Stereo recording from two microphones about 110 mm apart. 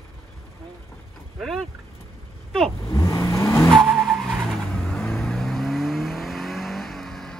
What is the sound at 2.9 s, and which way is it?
Vehicle, 25° left (ahead or behind).